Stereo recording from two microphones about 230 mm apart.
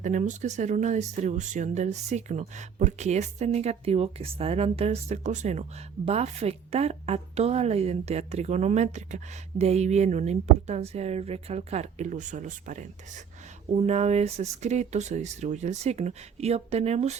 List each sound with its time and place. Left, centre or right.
0.0 s a woman's voice: right